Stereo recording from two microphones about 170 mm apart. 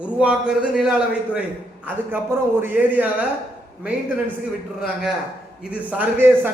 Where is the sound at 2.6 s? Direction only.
10° right (ahead or behind).